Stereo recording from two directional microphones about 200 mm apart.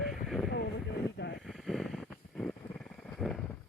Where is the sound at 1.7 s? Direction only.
Centre (ahead or behind).